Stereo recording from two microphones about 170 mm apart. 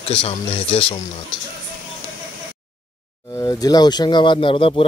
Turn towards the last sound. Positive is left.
turn(degrees=30)  # may be behind; listen again after turning